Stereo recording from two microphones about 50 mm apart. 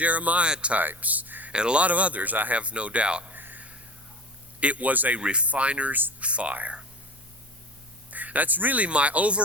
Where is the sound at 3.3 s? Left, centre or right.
Right.